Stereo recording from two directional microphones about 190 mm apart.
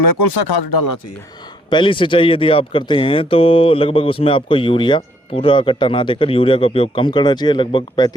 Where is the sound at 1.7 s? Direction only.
25° left (ahead or behind).